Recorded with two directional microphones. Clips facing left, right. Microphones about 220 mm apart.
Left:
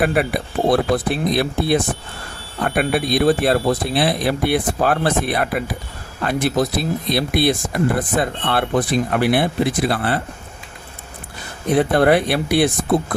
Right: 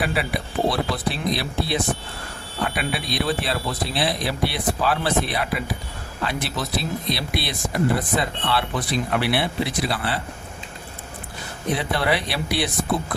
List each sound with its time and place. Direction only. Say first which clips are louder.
0.0 s speech: left 6 dB; 50° left (ahead or behind)
11.7 s speech: left 9 dB; 50° left (ahead or behind)